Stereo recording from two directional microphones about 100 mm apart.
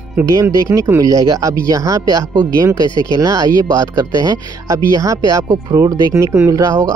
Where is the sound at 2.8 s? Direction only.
50° left (ahead or behind).